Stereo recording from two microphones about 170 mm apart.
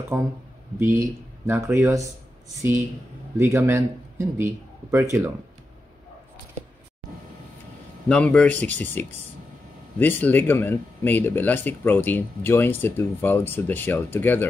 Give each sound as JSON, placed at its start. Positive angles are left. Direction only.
{"t": 0.1, "sound": "a man's voice", "side_deg": -20}
{"t": 3.3, "sound": "a man's voice", "side_deg": -15}
{"t": 8.1, "sound": "speech", "side_deg": 5}